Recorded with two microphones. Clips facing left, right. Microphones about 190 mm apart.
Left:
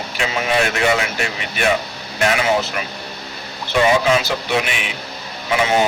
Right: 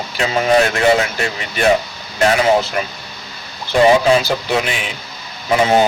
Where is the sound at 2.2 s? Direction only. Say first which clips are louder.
Right 4 dB; 35° right (ahead or behind).